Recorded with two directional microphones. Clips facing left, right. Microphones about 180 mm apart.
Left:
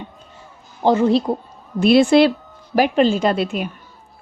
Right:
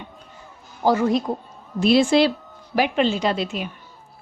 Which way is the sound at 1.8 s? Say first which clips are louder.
Left 4 dB; 60° left (ahead or behind).